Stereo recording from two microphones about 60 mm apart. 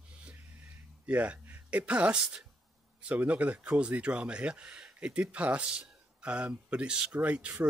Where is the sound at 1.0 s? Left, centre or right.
Right.